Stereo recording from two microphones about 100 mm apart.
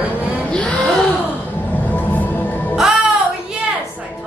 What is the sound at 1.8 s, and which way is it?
Music, 20° left (ahead or behind).